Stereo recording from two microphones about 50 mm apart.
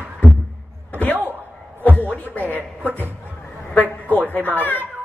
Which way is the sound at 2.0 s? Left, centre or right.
Left.